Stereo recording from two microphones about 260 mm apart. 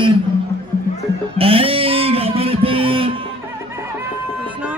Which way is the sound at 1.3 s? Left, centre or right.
Right.